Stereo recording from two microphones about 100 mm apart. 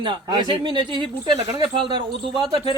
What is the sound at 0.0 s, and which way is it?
Speech, 55° right (ahead or behind).